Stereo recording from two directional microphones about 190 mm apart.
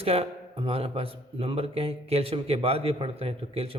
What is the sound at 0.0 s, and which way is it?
A man's voice, 30° right (ahead or behind).